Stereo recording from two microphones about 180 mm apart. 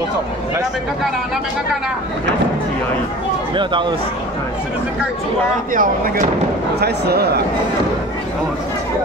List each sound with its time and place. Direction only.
3.5 s speech: 25° right (ahead or behind)
5.7 s speech: 50° right (ahead or behind)
6.8 s a man's voice: 65° right (ahead or behind)